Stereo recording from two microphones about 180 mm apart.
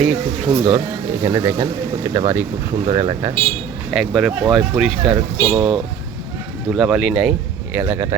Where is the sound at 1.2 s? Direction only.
20° right (ahead or behind).